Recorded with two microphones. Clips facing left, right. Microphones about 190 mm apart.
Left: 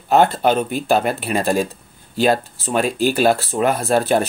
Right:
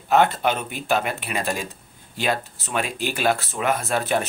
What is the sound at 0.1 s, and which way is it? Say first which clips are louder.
Speech: left 4 dB; 35° left (ahead or behind).